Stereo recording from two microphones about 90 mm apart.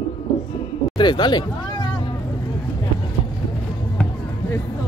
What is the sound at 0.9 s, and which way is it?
Speech, 60° left (ahead or behind).